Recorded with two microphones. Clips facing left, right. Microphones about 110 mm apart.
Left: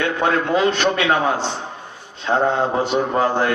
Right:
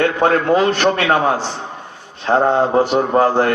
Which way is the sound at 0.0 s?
45° right (ahead or behind).